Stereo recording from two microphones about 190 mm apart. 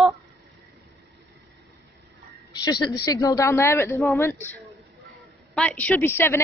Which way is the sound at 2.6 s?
20° left (ahead or behind).